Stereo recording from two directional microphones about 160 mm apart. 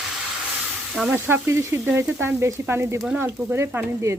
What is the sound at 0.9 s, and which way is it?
Frying, 10° right (ahead or behind).